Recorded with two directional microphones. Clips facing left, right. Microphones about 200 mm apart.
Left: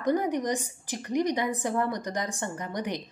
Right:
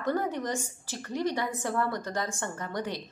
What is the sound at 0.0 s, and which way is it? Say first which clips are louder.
A woman's voice: left 3 dB; 15° left (ahead or behind).